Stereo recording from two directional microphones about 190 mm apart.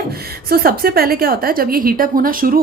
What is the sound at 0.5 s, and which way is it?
A woman's voice, 50° right (ahead or behind).